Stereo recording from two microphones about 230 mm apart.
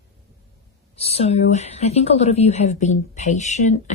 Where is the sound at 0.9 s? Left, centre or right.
Left.